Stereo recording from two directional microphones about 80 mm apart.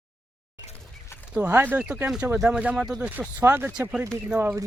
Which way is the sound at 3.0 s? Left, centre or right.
Right.